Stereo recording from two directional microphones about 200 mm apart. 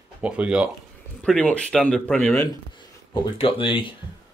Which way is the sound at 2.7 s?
25° left (ahead or behind).